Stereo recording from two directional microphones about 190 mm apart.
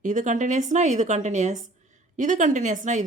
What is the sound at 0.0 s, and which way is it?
Speech, 40° right (ahead or behind).